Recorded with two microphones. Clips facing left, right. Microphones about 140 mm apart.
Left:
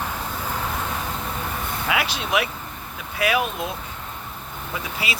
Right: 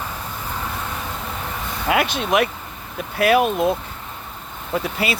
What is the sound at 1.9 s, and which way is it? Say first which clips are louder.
Speech: right 5 dB; 50° right (ahead or behind).